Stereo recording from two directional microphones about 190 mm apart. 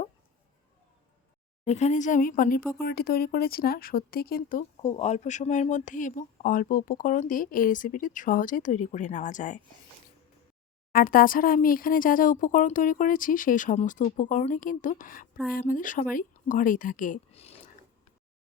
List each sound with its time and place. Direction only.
1.6 s speech: 35° left (ahead or behind)
4.8 s speech: 35° left (ahead or behind)
10.9 s speech: 50° left (ahead or behind); by 17.6 s 35° left (ahead or behind)